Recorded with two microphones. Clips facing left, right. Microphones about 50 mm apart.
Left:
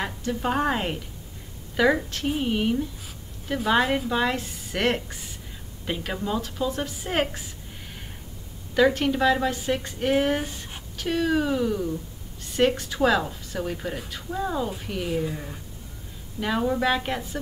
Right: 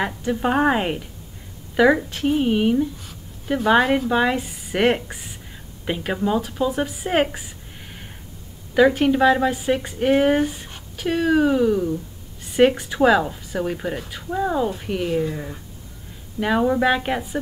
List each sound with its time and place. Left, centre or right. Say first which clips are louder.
0.0 s a woman's voice: right 5 dB; right
8.7 s a woman's voice: right 5 dB; centre